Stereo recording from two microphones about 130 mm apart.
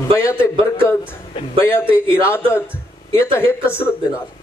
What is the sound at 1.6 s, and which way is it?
A man's voice, 15° left (ahead or behind).